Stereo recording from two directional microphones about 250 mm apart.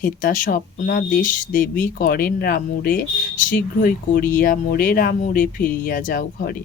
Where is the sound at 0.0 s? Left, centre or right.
Left.